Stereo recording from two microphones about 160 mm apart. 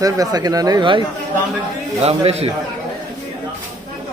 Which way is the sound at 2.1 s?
40° right (ahead or behind).